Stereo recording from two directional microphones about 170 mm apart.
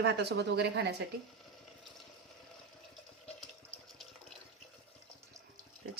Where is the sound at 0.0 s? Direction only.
80° right.